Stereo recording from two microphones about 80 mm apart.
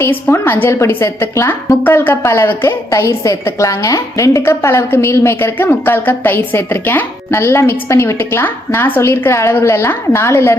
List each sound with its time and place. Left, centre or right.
0.0 s a woman's voice: left
2.9 s a woman's voice: left